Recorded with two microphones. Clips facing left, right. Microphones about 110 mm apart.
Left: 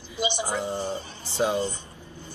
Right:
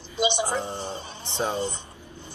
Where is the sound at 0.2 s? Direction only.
20° right (ahead or behind).